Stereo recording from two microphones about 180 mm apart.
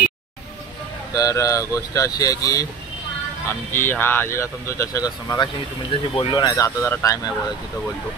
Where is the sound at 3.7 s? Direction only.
10° left (ahead or behind).